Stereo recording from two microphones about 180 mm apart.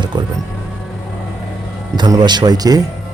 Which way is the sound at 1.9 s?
25° right (ahead or behind).